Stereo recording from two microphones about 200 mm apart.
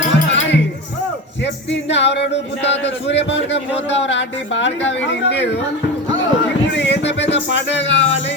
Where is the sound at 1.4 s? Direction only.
60° left (ahead or behind).